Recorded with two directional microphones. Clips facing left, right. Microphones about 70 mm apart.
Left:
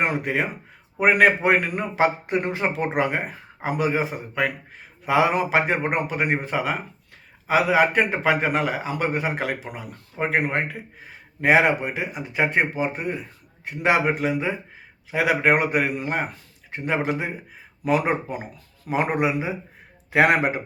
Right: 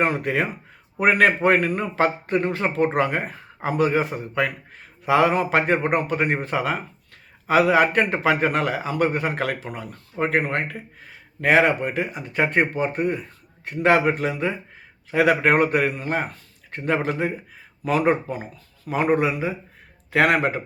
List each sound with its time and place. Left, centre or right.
0.0 s a man's voice: centre